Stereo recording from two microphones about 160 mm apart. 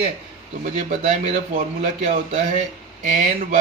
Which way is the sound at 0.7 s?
45° right (ahead or behind).